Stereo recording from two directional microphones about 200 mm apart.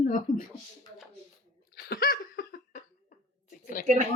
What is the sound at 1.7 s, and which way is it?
Laughter, 50° left (ahead or behind).